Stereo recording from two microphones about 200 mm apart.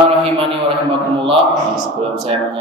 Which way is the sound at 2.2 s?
30° right (ahead or behind).